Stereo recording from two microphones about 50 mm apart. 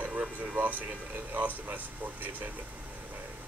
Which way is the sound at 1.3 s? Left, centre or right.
Right.